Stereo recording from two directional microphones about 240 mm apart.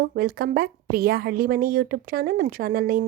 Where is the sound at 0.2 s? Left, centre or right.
Right.